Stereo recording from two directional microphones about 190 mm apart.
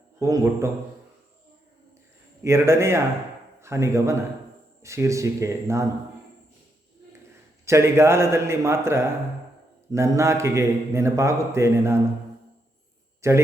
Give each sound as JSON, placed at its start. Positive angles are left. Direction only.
{"t": 0.2, "sound": "a man's voice", "side_deg": -15}
{"t": 2.4, "sound": "a man's voice", "side_deg": -15}
{"t": 7.6, "sound": "a man's voice", "side_deg": -15}
{"t": 13.2, "sound": "a man's voice", "side_deg": -15}